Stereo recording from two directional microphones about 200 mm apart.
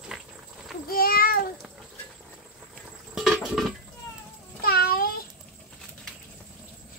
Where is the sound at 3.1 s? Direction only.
Centre (ahead or behind).